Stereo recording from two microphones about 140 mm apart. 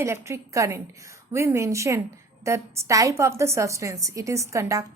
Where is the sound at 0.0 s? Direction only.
20° right (ahead or behind).